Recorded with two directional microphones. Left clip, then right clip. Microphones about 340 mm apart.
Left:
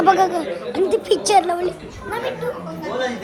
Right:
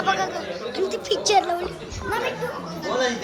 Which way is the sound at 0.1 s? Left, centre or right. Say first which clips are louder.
Left 7 dB; centre.